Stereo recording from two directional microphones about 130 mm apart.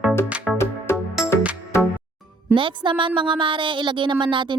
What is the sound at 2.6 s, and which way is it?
A woman's voice, 40° right (ahead or behind).